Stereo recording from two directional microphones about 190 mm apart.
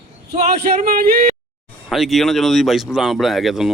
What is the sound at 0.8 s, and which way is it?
Speech, 45° right (ahead or behind).